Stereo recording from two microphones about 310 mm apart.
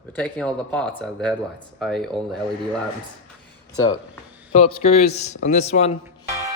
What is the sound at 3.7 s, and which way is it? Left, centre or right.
A man's voice, centre.